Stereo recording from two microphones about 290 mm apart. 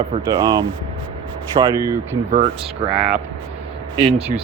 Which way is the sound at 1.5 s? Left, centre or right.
Centre.